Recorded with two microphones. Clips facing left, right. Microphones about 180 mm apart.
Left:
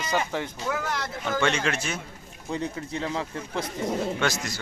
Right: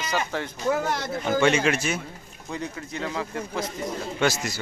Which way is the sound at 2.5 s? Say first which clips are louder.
Left 2 dB; 30° left (ahead or behind).